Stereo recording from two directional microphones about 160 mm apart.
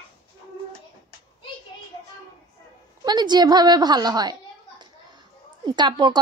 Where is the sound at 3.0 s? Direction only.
25° right (ahead or behind).